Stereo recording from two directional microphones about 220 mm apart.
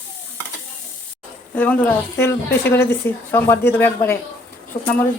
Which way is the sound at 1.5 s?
10° left (ahead or behind).